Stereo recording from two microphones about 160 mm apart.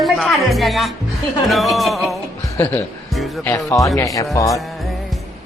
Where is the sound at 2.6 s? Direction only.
10° left (ahead or behind).